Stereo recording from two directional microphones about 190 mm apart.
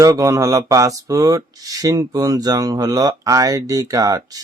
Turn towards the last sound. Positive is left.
turn(degrees=-20)  # may be behind; listen again after turning